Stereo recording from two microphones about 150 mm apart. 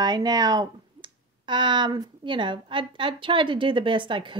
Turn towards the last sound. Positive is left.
turn(degrees=-35)  # may be behind; listen again after turning